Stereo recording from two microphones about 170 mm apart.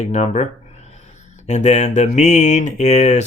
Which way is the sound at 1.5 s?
40° left (ahead or behind).